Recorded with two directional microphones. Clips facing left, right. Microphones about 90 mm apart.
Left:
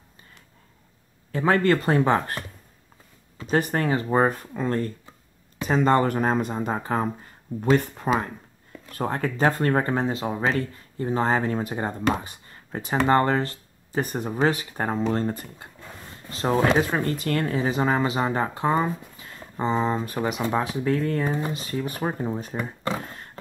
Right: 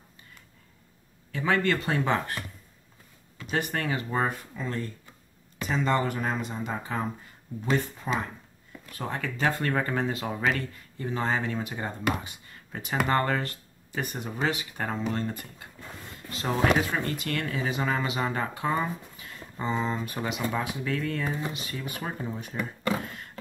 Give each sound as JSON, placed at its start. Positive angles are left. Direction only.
{"t": 1.3, "sound": "speech", "side_deg": 40}
{"t": 4.3, "sound": "speech", "side_deg": 50}